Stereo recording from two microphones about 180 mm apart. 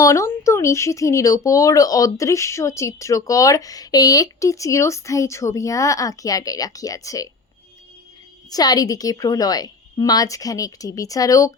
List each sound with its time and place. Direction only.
0.0 s speech: 15° left (ahead or behind)
8.4 s a woman's voice: 20° left (ahead or behind)